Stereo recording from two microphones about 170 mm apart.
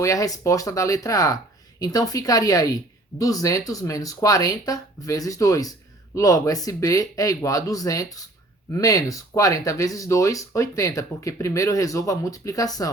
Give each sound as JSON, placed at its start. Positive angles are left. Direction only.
{"t": 0.0, "sound": "speech", "side_deg": 20}